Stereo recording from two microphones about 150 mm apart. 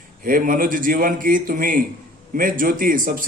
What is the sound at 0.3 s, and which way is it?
A man's voice, 65° right (ahead or behind).